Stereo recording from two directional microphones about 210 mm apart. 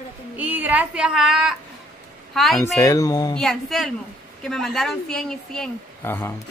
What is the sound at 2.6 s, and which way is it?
Speech, 15° left (ahead or behind).